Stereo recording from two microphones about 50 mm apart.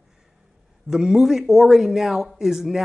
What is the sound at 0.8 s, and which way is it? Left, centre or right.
Speech, centre.